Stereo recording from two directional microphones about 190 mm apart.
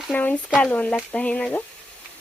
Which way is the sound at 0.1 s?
10° left (ahead or behind).